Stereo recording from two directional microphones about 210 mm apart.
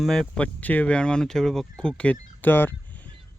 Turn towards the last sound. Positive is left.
turn(degrees=10)  # may be behind; listen again after turning